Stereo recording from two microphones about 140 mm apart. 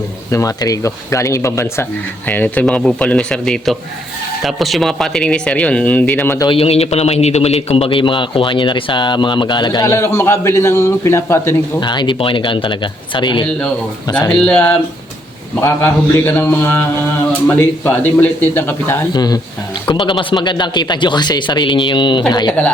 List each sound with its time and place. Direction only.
0.3 s speech: 25° left (ahead or behind)
6.4 s a man's voice: 40° left (ahead or behind); by 11.5 s 20° left (ahead or behind)
11.8 s a man's voice: 30° left (ahead or behind)
14.2 s speech: 5° left (ahead or behind)
19.1 s a man's voice: 30° left (ahead or behind)